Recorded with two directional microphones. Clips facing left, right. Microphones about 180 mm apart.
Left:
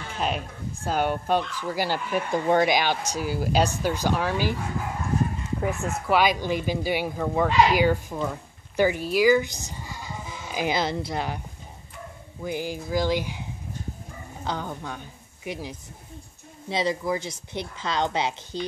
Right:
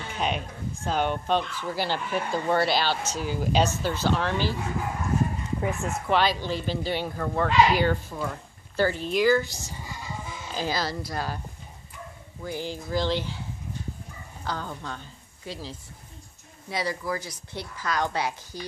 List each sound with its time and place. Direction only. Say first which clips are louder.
0.1 s speech: left 1 dB; centre (ahead or behind)
5.6 s a woman's voice: left 2 dB; 10° left (ahead or behind)
12.4 s a woman's voice: left 3 dB; 15° left (ahead or behind)